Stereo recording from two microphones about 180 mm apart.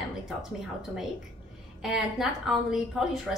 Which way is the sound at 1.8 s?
Centre (ahead or behind).